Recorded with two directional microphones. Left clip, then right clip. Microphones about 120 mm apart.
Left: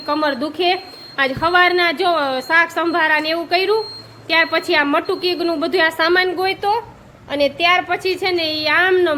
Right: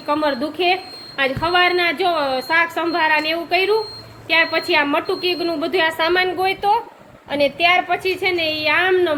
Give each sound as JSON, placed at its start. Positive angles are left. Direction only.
{"t": 0.0, "sound": "a woman's voice", "side_deg": 25}